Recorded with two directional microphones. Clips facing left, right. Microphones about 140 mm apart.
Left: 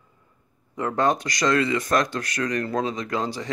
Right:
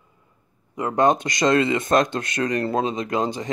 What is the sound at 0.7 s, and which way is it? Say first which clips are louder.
Speech: right 3 dB; 15° right (ahead or behind).